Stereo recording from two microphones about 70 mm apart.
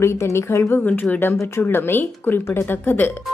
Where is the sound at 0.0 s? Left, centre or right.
Left.